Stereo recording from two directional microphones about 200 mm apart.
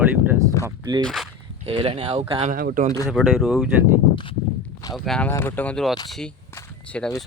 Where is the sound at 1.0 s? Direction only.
5° left (ahead or behind).